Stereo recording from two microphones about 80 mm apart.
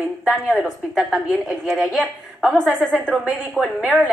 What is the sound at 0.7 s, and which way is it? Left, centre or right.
A man's voice, centre.